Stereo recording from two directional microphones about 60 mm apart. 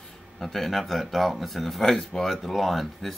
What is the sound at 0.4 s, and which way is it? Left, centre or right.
Speech, centre.